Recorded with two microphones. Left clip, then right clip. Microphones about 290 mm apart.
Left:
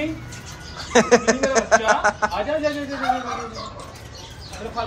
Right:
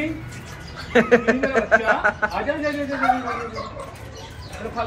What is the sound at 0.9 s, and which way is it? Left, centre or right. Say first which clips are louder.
Speech: left 1 dB; centre.